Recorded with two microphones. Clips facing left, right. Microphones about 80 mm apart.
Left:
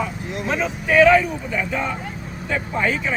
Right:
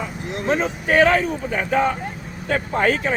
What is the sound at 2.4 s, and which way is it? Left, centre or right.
Speech, right.